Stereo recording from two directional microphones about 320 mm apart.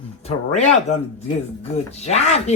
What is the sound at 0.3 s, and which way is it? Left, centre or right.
Speech, left.